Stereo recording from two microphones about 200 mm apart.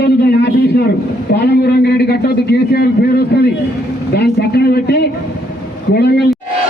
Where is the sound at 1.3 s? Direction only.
55° left (ahead or behind).